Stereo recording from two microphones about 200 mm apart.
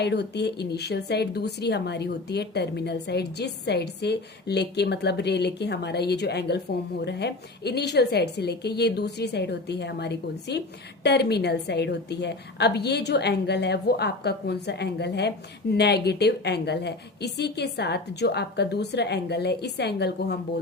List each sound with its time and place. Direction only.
0.0 s a woman's voice: 55° left (ahead or behind)